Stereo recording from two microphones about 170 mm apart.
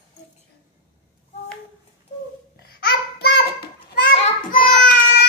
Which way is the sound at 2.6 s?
70° left (ahead or behind).